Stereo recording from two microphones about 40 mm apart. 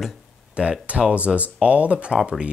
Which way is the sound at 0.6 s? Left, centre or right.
Right.